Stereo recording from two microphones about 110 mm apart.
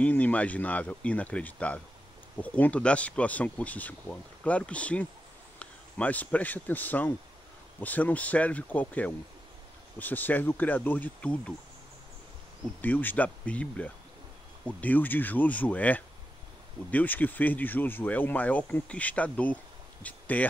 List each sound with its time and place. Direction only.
0.0 s speech: 15° left (ahead or behind)
12.8 s speech: 15° left (ahead or behind)